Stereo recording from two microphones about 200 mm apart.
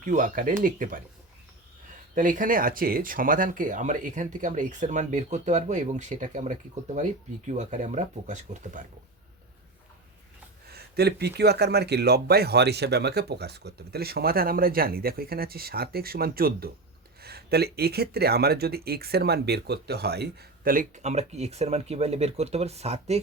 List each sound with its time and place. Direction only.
0.0 s speech: 40° right (ahead or behind)
2.1 s speech: 40° right (ahead or behind)
10.7 s speech: 55° right (ahead or behind); by 23.2 s 30° right (ahead or behind)